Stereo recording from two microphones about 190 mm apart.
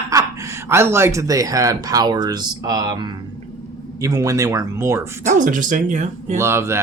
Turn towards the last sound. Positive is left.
turn(degrees=-15)  # may be behind; listen again after turning